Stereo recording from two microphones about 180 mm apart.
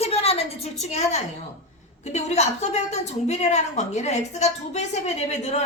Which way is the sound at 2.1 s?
40° left (ahead or behind).